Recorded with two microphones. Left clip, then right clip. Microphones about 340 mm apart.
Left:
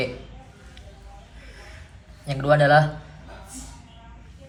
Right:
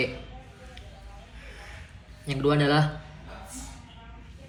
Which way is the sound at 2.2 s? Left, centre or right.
Left.